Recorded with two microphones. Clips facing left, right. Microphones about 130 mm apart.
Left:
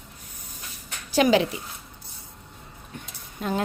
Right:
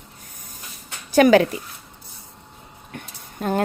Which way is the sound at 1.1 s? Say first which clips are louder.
Right 6 dB; 50° right (ahead or behind).